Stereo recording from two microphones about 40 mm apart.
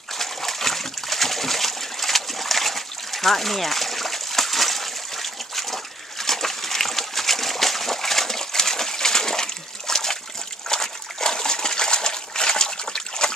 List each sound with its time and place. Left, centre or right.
0.2 s splash: centre
10.7 s water: centre